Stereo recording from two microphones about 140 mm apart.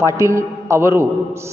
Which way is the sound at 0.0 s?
20° right (ahead or behind).